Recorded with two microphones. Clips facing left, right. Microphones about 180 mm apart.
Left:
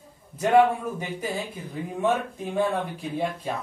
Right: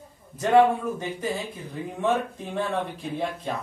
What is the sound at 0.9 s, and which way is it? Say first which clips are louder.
Speech: right 1 dB; 10° left (ahead or behind).